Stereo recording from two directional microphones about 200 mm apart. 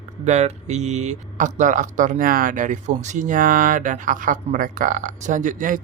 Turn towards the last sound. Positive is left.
turn(degrees=-40)  # may be behind; listen again after turning